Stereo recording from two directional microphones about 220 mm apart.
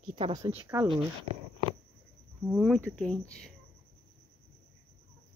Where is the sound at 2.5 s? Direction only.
Centre (ahead or behind).